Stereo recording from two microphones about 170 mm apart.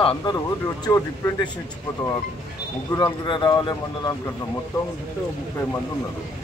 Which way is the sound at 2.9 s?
25° left (ahead or behind).